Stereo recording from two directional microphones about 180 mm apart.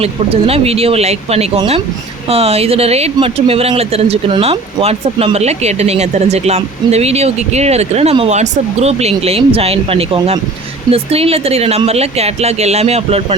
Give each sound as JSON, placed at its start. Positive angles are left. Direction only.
{"t": 0.0, "sound": "speech", "side_deg": -35}